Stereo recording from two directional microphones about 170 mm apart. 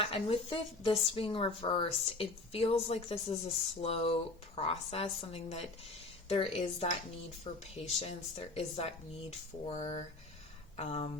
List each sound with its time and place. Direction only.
0.0 s speech: 35° left (ahead or behind)